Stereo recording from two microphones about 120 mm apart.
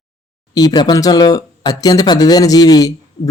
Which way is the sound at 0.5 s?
35° left (ahead or behind).